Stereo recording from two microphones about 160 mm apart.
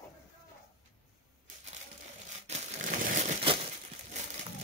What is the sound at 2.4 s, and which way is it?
Crushing, 45° right (ahead or behind).